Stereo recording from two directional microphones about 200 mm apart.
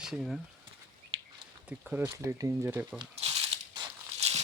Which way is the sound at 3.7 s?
35° right (ahead or behind).